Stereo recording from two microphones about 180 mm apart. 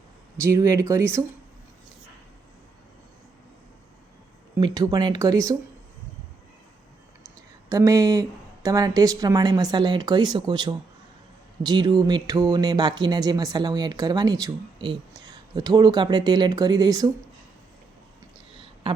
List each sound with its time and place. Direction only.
0.4 s speech: 20° right (ahead or behind)
4.5 s speech: 20° right (ahead or behind)
7.7 s speech: 20° right (ahead or behind)
18.5 s a sound: 30° right (ahead or behind)